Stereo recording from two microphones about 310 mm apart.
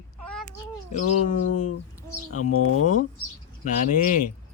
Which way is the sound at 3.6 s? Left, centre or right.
Left.